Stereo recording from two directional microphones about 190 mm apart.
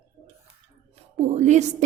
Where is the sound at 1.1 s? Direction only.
35° right (ahead or behind).